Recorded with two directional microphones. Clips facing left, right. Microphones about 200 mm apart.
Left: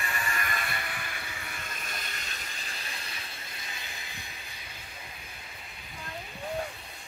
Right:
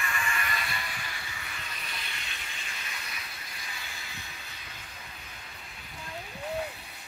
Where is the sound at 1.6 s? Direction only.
45° left (ahead or behind); by 3.3 s 30° left (ahead or behind).